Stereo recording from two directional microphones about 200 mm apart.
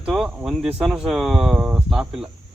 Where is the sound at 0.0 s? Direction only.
5° right (ahead or behind).